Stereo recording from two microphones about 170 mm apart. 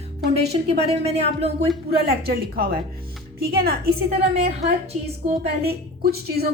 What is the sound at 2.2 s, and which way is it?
A woman's voice, 60° right (ahead or behind).